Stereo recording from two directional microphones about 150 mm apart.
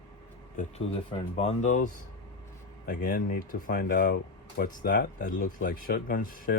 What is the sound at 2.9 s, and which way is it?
Speech, 70° left (ahead or behind).